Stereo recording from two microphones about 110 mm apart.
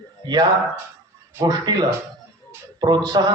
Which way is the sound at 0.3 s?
35° right (ahead or behind).